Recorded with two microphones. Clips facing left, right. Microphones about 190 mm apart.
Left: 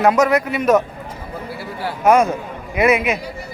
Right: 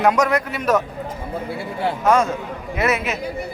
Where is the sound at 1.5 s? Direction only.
25° right (ahead or behind).